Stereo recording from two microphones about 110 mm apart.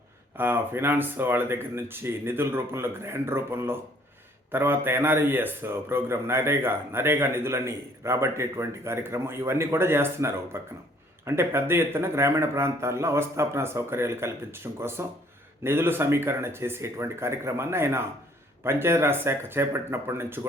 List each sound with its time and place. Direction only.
0.3 s a man's voice: 20° right (ahead or behind)